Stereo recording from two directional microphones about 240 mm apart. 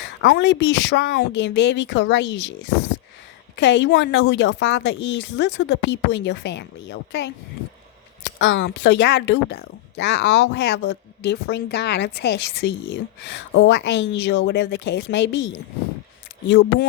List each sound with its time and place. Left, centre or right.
0.0 s speech: left
16.5 s speech: left